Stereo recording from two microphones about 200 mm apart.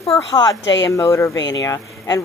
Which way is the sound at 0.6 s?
65° left (ahead or behind).